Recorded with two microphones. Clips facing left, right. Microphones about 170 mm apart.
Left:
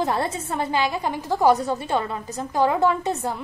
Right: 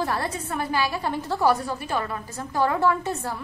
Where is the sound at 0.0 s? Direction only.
20° left (ahead or behind).